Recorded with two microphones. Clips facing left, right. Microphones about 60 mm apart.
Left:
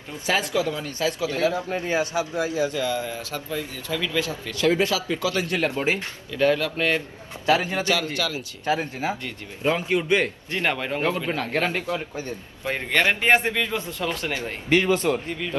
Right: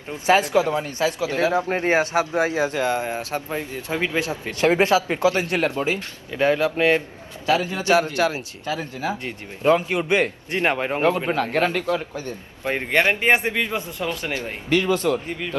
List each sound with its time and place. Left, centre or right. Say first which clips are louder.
0.3 s speech: right 6 dB; right
5.7 s speech: right 1 dB; left
6.3 s a man's voice: right 2 dB; right
7.4 s speech: even; left
7.9 s a man's voice: right 6 dB; right
8.6 s speech: left 2 dB; left
9.2 s a man's voice: right 5 dB; right
14.7 s speech: even; left